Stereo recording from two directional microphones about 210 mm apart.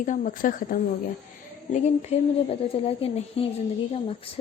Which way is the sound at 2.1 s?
30° left (ahead or behind).